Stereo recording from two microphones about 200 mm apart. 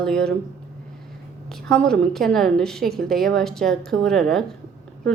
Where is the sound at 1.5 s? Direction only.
5° left (ahead or behind).